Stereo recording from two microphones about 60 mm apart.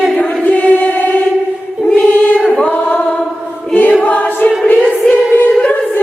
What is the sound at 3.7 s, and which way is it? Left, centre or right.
Choir, left.